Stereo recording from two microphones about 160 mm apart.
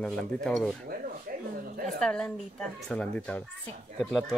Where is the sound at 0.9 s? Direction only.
60° right (ahead or behind).